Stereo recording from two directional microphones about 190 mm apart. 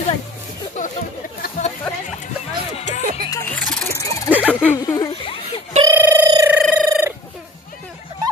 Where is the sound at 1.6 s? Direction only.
40° left (ahead or behind).